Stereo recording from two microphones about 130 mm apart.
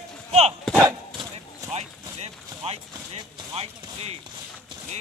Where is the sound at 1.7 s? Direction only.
55° right (ahead or behind).